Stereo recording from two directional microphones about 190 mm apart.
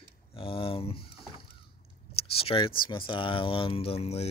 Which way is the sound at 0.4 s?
30° left (ahead or behind).